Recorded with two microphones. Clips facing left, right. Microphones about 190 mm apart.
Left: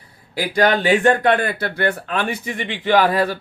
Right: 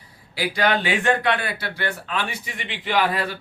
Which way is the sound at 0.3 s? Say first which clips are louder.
Left 4 dB; 45° left (ahead or behind).